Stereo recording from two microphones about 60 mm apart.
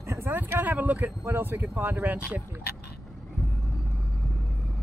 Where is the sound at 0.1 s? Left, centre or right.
Right.